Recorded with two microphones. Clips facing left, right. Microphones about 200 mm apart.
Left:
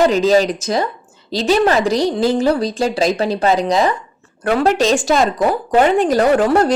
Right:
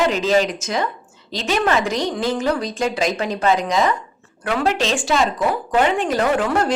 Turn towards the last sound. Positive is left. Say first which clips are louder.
# left 6 dB
turn(degrees=35)  # may be behind; listen again after turning